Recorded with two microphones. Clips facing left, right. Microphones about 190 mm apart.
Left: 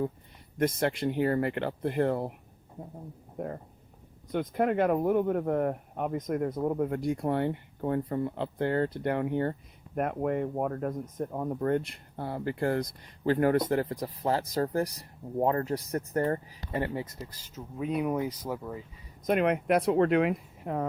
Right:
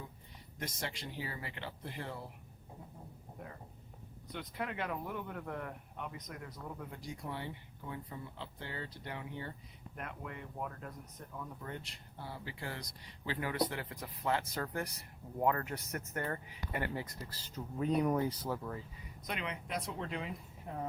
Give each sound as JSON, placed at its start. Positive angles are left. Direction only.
{"t": 0.6, "sound": "speech", "side_deg": 55}
{"t": 3.3, "sound": "speech", "side_deg": 50}
{"t": 17.4, "sound": "speech", "side_deg": 5}
{"t": 19.2, "sound": "speech", "side_deg": 55}